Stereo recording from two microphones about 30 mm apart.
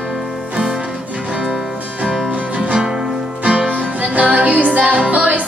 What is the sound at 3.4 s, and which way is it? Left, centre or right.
Music, right.